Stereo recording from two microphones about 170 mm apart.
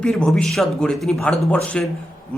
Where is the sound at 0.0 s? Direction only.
5° left (ahead or behind).